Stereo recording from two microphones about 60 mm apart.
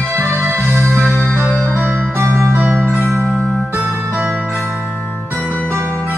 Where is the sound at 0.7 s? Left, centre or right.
Right.